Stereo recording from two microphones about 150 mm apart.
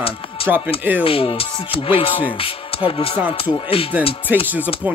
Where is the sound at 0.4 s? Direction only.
40° left (ahead or behind).